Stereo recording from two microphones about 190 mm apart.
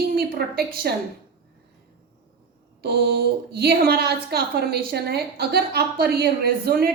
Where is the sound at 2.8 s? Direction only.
55° right (ahead or behind).